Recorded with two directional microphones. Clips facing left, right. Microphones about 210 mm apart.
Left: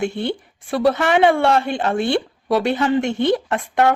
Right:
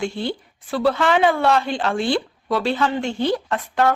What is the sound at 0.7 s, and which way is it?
Speech, 25° left (ahead or behind).